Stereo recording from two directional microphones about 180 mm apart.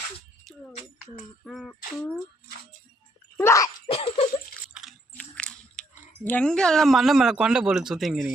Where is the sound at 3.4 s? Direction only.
15° left (ahead or behind).